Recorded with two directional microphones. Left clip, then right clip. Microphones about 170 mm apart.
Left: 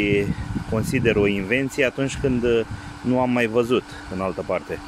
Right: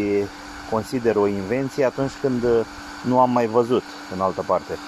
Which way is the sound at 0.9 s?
20° left (ahead or behind).